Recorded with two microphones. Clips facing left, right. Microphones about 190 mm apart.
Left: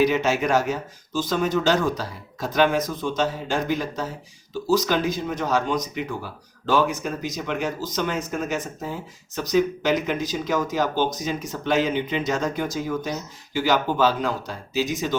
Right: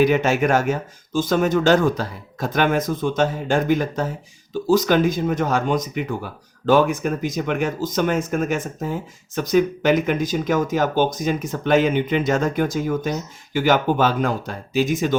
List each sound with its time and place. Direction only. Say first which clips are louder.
0.0 s speech: right 3 dB; 55° right (ahead or behind)